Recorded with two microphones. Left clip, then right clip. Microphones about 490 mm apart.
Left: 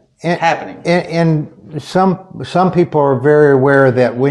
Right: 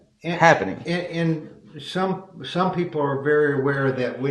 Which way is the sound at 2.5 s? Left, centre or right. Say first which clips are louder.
Left 11 dB; left.